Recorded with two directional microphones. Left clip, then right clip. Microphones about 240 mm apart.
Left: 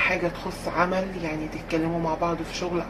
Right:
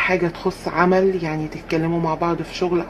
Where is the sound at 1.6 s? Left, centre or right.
Right.